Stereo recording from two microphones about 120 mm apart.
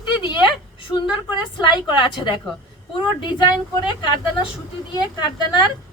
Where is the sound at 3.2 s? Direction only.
40° left (ahead or behind).